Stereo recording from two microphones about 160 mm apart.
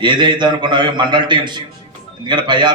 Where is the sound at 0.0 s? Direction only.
30° right (ahead or behind).